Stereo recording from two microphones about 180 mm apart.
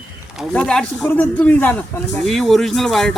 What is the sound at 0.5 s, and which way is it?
Speech, 5° left (ahead or behind).